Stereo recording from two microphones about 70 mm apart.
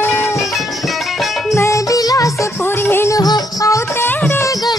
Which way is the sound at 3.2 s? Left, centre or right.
Left.